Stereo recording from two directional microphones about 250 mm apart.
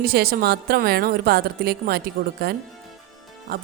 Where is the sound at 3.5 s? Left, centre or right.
Right.